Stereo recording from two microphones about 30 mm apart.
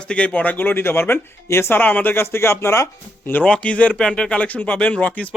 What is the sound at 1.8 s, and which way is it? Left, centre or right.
Speech, left.